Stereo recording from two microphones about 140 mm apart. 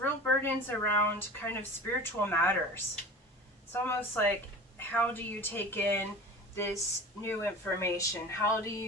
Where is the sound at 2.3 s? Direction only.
15° left (ahead or behind).